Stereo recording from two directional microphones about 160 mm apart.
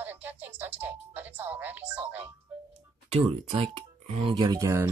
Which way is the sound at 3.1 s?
40° right (ahead or behind).